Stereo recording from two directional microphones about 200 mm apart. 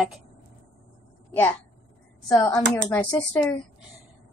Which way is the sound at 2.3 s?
15° left (ahead or behind).